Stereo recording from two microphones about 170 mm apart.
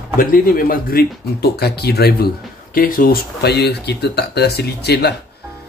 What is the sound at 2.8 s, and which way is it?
Speech, 55° left (ahead or behind).